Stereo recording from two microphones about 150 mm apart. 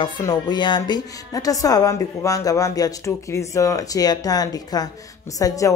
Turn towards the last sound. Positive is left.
turn(degrees=20)  # may be behind; listen again after turning